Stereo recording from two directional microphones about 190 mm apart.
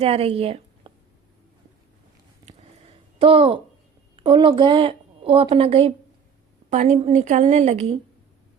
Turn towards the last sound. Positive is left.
turn(degrees=-35)  # may be behind; listen again after turning